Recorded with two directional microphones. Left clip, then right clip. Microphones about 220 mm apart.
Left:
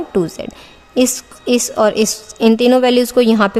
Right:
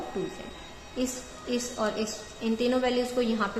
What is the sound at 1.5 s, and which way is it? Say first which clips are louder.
A woman's voice: left 16 dB; 55° left (ahead or behind).